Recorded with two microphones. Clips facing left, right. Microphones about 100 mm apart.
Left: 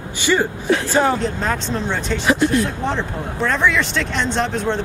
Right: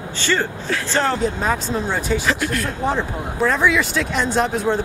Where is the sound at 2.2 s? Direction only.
25° left (ahead or behind).